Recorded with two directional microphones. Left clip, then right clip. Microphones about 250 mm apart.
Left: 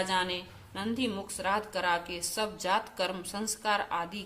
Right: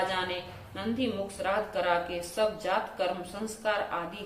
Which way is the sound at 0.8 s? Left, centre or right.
Left.